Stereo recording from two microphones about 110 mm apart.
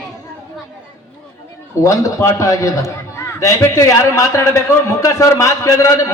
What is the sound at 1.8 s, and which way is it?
A man's voice, 30° left (ahead or behind).